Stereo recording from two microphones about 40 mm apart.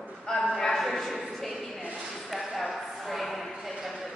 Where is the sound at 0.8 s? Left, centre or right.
Centre.